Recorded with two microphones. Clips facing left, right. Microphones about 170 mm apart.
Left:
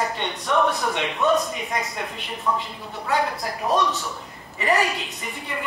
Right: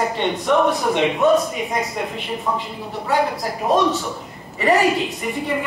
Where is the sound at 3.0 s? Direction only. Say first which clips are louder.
Right 4 dB; centre (ahead or behind).